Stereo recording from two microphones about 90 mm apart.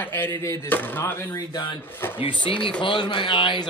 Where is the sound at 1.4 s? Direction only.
55° left (ahead or behind).